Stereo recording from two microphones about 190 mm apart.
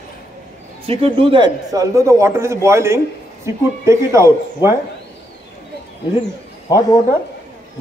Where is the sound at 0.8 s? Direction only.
30° right (ahead or behind).